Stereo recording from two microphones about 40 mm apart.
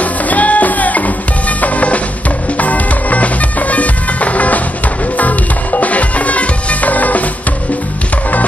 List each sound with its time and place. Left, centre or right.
0.0 s music: left
1.6 s drum: left
2.5 s music: left